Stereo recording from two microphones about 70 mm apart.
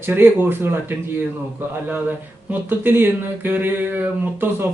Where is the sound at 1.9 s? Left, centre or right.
Right.